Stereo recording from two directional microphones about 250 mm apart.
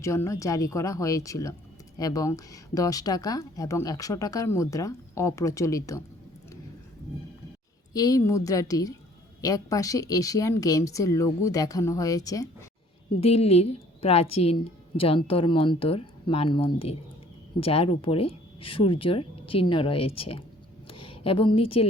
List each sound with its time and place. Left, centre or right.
0.0 s speech: centre
7.9 s speech: centre
13.1 s a woman's voice: left
21.0 s a sound: left